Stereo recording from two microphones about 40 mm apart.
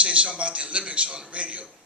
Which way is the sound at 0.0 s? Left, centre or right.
Right.